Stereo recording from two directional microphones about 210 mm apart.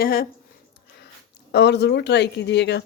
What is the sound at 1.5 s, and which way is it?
Speech, 55° left (ahead or behind).